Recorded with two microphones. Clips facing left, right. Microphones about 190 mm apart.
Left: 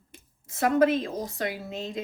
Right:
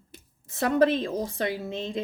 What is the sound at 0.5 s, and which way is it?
Speech, 30° right (ahead or behind).